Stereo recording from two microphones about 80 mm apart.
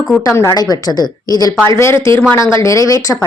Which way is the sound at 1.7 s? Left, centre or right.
Left.